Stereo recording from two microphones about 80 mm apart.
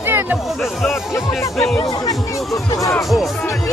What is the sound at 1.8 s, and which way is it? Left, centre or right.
Speech, left.